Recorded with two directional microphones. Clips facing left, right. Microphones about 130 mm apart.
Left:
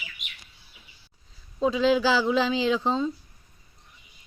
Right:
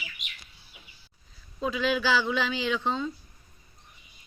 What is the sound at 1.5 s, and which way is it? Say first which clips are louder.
Speech: left 6 dB; 30° left (ahead or behind).